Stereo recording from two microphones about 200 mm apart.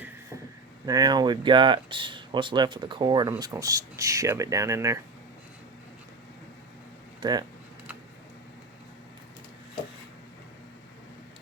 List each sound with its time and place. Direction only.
0.9 s speech: 20° right (ahead or behind)
7.2 s speech: 20° right (ahead or behind)